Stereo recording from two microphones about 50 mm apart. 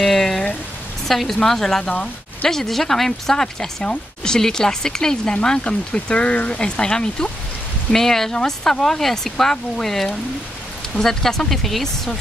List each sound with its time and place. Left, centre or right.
0.0 s a sound: centre
1.0 s speech: centre
1.9 s speech: left
2.5 s speech: centre